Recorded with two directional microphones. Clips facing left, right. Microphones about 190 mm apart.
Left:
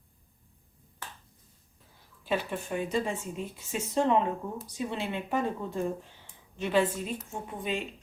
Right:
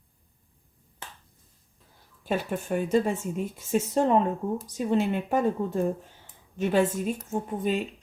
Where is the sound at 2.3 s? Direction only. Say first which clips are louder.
Right 3 dB; 45° right (ahead or behind).